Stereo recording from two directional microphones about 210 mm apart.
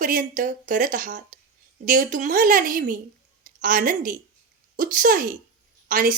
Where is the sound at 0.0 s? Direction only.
40° right (ahead or behind).